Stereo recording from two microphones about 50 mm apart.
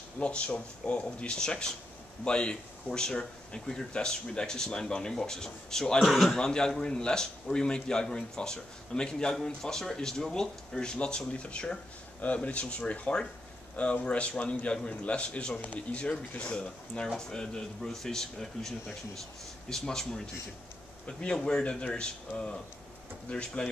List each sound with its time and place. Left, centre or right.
0.2 s a man's voice: left
5.9 s speech: centre
6.3 s a man's voice: centre
19.7 s a man's voice: centre
21.2 s a man's voice: centre
23.3 s a man's voice: left